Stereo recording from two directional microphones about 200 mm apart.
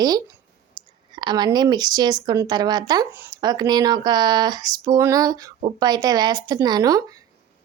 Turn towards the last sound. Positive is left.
turn(degrees=-20)  # may be behind; listen again after turning